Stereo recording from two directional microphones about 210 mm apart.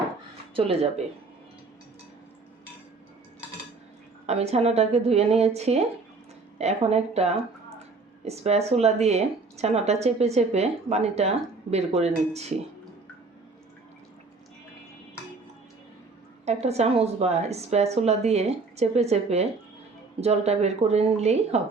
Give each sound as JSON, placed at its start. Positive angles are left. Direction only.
{"t": 0.5, "sound": "speech", "side_deg": -30}
{"t": 4.3, "sound": "a woman's voice", "side_deg": -30}
{"t": 16.5, "sound": "a woman's voice", "side_deg": -30}